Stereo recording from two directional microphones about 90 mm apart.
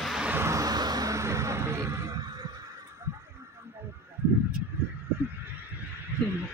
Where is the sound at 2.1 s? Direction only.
50° right (ahead or behind).